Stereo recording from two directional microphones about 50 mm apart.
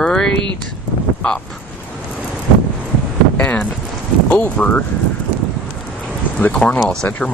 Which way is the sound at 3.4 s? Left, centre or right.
Left.